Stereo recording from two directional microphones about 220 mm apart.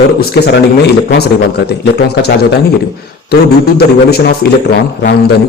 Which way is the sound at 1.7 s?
45° left (ahead or behind).